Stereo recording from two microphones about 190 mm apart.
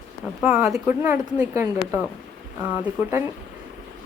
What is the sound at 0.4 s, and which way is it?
A woman's voice, 5° right (ahead or behind).